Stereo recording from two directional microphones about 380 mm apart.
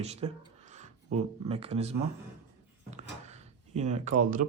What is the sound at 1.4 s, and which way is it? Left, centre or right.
Speech, centre.